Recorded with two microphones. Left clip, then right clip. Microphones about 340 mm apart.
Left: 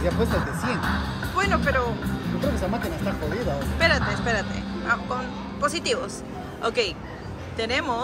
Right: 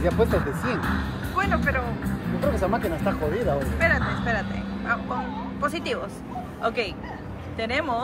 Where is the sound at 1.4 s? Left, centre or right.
Centre.